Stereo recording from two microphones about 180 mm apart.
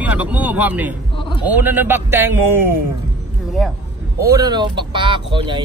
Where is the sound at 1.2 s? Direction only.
25° left (ahead or behind).